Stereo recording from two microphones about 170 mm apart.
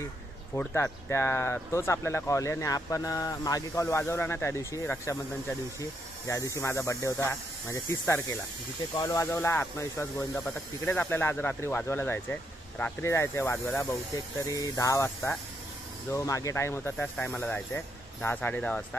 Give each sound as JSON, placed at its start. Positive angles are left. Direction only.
{"t": 0.6, "sound": "speech", "side_deg": 10}